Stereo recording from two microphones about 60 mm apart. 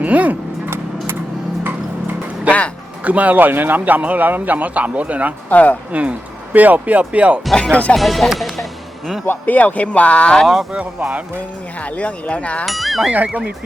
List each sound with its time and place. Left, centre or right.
0.0 s a man's voice: right
3.0 s a man's voice: right
5.5 s speech: left
5.9 s a man's voice: right
7.5 s music: centre
7.9 s speech: centre
9.2 s speech: left
10.4 s speech: centre
11.9 s speech: left
12.6 s speech: centre
13.1 s a man's voice: right